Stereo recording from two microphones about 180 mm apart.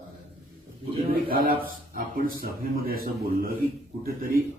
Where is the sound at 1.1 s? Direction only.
55° right (ahead or behind).